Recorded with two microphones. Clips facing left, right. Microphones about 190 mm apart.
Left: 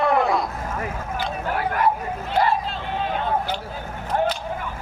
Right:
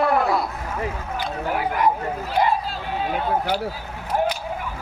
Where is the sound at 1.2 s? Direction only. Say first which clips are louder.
Right 1 dB; 15° right (ahead or behind).